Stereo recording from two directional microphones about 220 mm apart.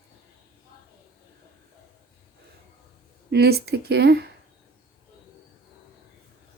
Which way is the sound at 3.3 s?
45° right (ahead or behind).